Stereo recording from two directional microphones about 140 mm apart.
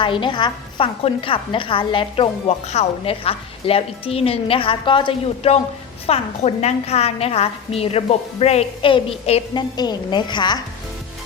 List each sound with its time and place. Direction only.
0.0 s a woman's voice: 35° left (ahead or behind)
9.6 s a woman's voice: 30° left (ahead or behind)